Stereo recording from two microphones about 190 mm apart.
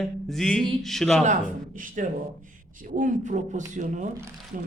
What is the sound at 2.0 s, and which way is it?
A woman's voice, 45° right (ahead or behind).